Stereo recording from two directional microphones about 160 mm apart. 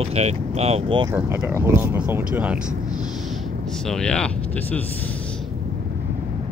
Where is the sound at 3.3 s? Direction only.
5° left (ahead or behind).